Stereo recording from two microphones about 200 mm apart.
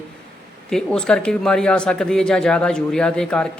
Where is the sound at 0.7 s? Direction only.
5° left (ahead or behind).